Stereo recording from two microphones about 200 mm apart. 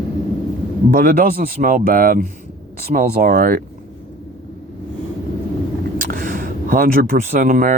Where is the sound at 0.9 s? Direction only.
45° right (ahead or behind).